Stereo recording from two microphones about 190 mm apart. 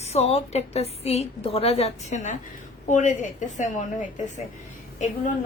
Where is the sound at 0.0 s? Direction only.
35° left (ahead or behind).